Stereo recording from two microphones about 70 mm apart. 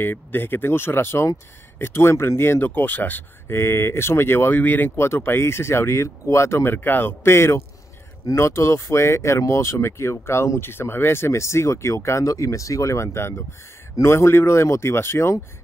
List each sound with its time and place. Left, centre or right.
0.0 s speech: left